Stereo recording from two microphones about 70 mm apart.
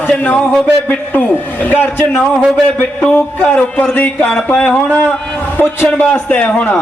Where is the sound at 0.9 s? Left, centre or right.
Left.